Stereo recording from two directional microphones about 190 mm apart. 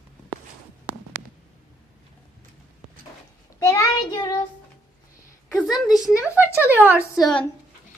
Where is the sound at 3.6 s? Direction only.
15° left (ahead or behind).